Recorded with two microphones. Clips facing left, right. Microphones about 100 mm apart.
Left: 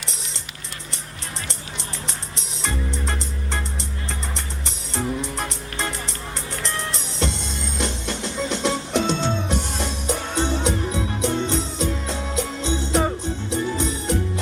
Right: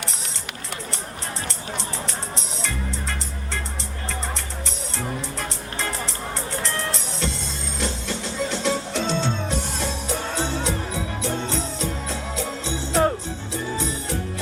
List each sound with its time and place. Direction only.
2.6 s music: 20° left (ahead or behind)